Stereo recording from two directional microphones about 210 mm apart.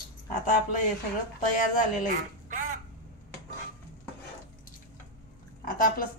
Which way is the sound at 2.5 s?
40° right (ahead or behind).